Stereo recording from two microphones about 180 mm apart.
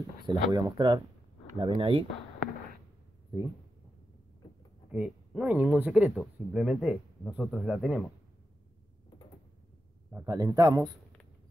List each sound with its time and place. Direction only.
0.3 s a man's voice: 20° right (ahead or behind)
4.9 s speech: 5° right (ahead or behind)
10.1 s a man's voice: 20° right (ahead or behind)